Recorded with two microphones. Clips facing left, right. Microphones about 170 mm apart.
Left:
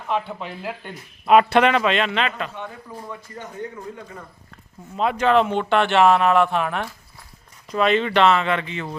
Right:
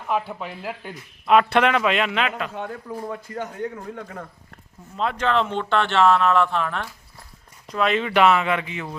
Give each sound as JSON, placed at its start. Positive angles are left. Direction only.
{"t": 0.1, "sound": "a man's voice", "side_deg": -5}
{"t": 2.6, "sound": "speech", "side_deg": -55}
{"t": 4.9, "sound": "speech", "side_deg": 10}
{"t": 7.7, "sound": "speech", "side_deg": 0}